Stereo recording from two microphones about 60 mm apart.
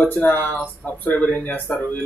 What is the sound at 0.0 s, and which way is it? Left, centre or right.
Speech, left.